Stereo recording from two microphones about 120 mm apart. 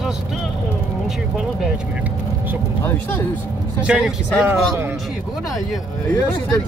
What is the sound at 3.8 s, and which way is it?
Speech, 10° right (ahead or behind).